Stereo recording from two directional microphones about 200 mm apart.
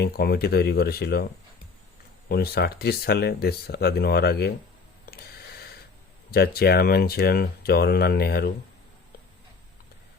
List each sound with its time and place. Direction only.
0.0 s speech: 50° left (ahead or behind)
2.3 s speech: 55° left (ahead or behind)
5.1 s a sound: 50° left (ahead or behind)
6.3 s speech: 50° left (ahead or behind)